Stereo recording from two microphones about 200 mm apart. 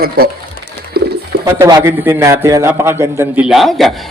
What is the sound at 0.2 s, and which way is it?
Speech, 50° right (ahead or behind).